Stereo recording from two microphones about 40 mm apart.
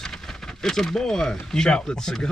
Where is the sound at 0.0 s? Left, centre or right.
Centre.